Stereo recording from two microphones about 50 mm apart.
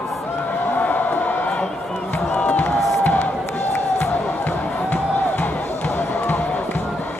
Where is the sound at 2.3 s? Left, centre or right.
Left.